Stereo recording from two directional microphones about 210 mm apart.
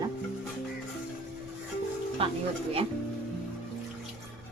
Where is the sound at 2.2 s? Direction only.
25° right (ahead or behind).